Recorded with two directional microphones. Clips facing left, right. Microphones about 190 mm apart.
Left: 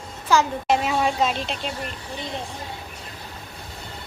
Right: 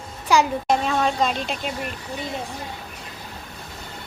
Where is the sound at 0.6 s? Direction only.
5° left (ahead or behind).